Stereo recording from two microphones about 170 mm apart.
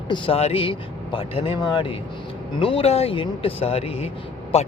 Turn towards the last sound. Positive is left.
turn(degrees=35)  # may be behind; listen again after turning